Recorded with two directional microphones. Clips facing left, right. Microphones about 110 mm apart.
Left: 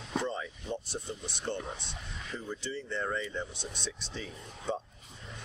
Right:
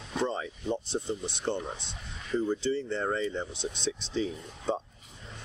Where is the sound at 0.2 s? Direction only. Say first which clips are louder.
Right 4 dB; 30° right (ahead or behind).